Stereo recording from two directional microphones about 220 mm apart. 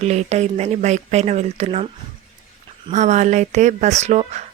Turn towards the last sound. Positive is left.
turn(degrees=-30)  # may be behind; listen again after turning